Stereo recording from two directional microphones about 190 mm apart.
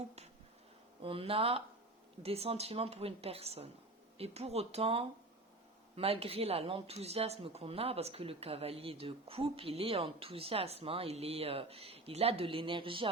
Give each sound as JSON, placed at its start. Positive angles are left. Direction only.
{"t": 1.0, "sound": "speech", "side_deg": -30}